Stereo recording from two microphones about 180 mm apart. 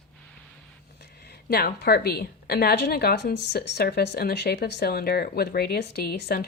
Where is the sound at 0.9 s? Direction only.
60° left (ahead or behind).